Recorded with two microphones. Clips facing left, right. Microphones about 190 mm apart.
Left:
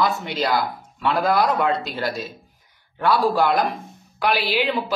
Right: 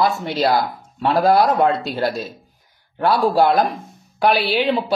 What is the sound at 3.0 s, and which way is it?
Speech, 30° right (ahead or behind).